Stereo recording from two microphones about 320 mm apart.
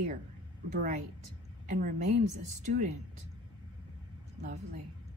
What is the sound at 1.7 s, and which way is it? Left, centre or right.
A woman's voice, right.